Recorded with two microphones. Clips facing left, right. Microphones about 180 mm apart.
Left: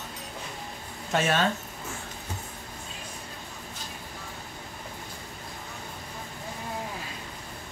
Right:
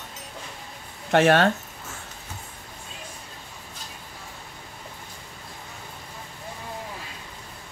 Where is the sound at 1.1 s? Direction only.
65° right (ahead or behind).